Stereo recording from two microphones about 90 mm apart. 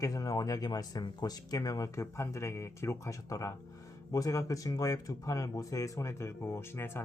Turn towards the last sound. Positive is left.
turn(degrees=25)  # may be behind; listen again after turning